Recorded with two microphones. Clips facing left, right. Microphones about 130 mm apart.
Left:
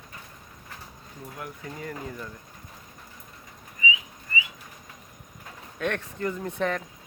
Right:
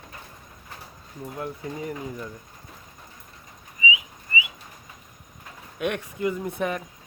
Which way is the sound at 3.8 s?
10° right (ahead or behind).